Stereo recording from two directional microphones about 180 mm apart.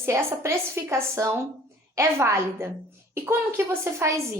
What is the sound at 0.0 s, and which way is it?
A woman's voice, 15° right (ahead or behind).